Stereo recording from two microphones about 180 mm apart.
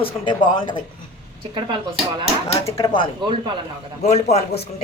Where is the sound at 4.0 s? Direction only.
40° left (ahead or behind).